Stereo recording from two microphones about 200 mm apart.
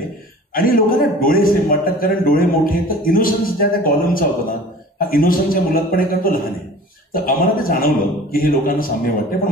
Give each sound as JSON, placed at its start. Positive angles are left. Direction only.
{"t": 0.6, "sound": "a man's voice", "side_deg": 45}